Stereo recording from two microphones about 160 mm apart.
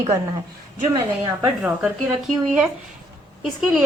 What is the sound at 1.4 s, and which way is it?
A woman's voice, 10° right (ahead or behind).